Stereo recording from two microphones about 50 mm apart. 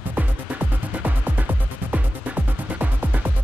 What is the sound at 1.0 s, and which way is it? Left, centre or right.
Music, right.